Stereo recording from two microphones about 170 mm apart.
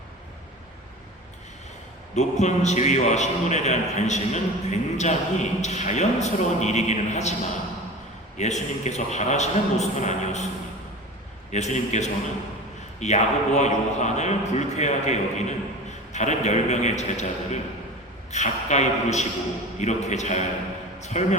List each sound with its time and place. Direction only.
2.1 s a man's voice: 40° left (ahead or behind)
8.4 s a man's voice: 45° left (ahead or behind)
11.5 s a man's voice: 45° left (ahead or behind)